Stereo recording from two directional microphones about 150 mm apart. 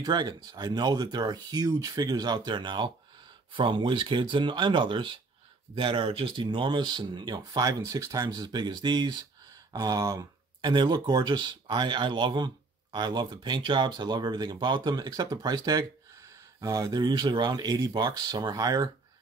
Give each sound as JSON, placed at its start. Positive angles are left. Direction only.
{"t": 0.0, "sound": "speech", "side_deg": -30}